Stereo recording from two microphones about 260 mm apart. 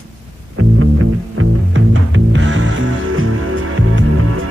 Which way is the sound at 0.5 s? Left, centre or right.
Right.